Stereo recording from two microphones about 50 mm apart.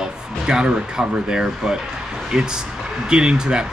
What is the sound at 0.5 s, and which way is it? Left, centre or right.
Speech, centre.